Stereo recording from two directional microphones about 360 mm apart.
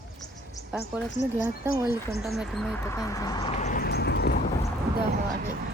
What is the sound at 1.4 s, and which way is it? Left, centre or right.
Speech, centre.